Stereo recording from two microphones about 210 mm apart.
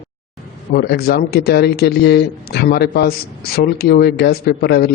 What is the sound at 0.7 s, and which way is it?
Speech, 50° left (ahead or behind).